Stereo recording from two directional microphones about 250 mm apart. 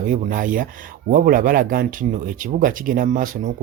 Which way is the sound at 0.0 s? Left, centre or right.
Right.